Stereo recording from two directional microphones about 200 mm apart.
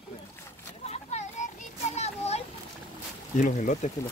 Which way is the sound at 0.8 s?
35° left (ahead or behind).